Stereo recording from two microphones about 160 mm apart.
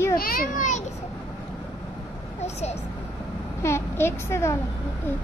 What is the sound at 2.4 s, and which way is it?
Speech, 45° left (ahead or behind).